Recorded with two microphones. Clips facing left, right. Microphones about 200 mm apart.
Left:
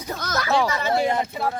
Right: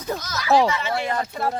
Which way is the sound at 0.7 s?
40° left (ahead or behind).